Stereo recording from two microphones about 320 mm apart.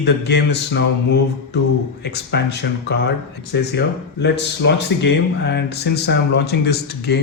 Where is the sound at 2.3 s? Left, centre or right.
Left.